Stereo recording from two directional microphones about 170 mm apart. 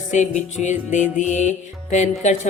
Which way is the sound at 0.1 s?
45° left (ahead or behind).